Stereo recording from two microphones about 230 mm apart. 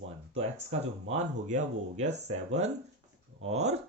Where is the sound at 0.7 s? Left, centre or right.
Right.